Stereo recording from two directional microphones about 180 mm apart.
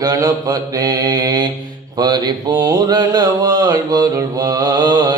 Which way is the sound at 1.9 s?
25° right (ahead or behind).